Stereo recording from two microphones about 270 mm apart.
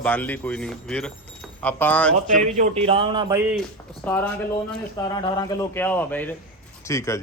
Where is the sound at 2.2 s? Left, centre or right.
Right.